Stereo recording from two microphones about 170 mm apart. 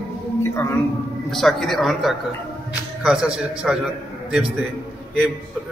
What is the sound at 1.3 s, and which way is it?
A man's voice, centre (ahead or behind).